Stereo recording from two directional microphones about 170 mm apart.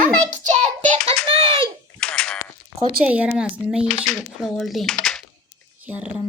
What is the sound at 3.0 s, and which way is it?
Speech, 5° right (ahead or behind).